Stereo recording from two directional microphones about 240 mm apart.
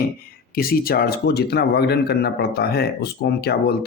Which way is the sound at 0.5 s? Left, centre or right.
Left.